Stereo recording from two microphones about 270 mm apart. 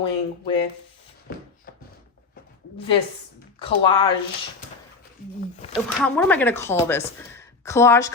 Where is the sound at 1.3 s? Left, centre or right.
Left.